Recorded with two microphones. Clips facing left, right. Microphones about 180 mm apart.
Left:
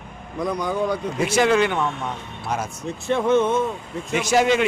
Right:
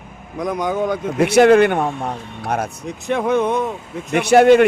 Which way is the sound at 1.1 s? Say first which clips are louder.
Right 8 dB; 65° right (ahead or behind).